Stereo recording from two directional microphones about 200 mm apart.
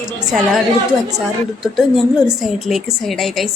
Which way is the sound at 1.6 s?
Centre (ahead or behind).